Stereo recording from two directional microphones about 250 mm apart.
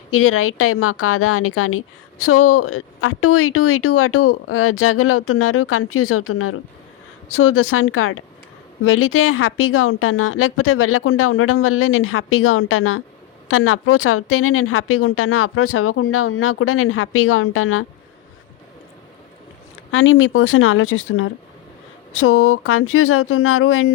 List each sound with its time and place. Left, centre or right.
0.1 s a woman's voice: left
19.9 s a woman's voice: left